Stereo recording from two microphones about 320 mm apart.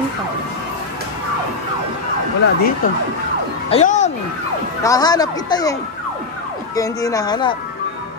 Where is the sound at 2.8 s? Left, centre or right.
Left.